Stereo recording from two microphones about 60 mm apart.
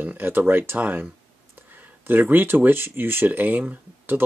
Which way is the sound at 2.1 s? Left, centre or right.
Right.